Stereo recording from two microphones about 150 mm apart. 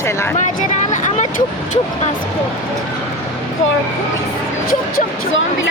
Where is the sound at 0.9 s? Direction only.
50° left (ahead or behind).